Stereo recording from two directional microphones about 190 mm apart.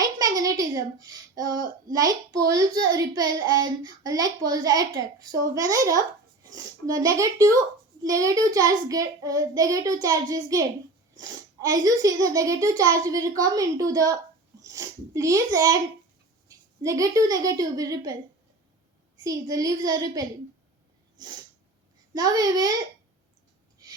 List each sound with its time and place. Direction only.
0.0 s a child's voice: 20° right (ahead or behind)
19.2 s a child's voice: 20° right (ahead or behind)